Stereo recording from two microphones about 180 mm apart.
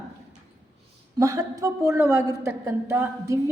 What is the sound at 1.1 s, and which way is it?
A woman's voice, 20° right (ahead or behind).